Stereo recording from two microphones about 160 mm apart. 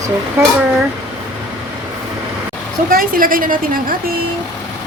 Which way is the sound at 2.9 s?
60° right (ahead or behind).